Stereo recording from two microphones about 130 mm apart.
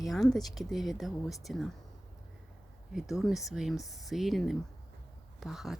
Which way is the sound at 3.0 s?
5° right (ahead or behind).